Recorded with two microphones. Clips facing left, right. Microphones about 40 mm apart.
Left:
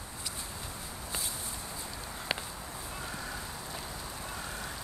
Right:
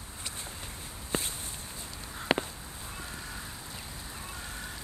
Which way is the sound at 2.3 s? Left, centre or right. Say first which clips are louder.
Right 8 dB; right.